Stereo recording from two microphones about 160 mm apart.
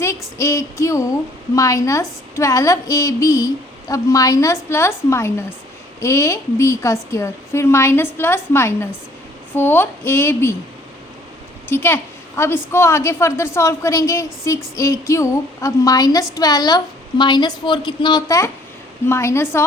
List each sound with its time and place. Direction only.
0.0 s a woman's voice: 20° left (ahead or behind)
11.7 s a woman's voice: 15° left (ahead or behind)